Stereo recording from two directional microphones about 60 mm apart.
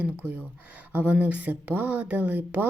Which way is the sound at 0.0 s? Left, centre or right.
Right.